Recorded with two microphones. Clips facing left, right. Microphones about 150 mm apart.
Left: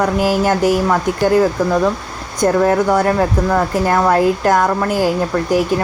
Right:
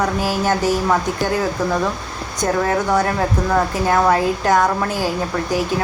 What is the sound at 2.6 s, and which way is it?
Speech, 5° left (ahead or behind).